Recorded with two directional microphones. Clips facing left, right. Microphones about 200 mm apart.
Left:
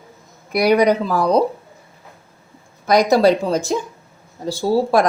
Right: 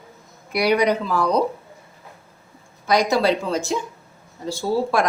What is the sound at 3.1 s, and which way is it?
A woman's voice, 40° left (ahead or behind).